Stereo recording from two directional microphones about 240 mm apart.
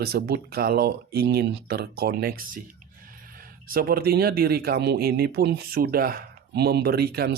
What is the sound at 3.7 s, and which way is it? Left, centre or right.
Speech, right.